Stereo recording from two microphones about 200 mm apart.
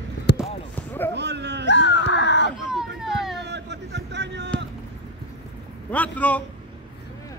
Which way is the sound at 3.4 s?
60° right (ahead or behind).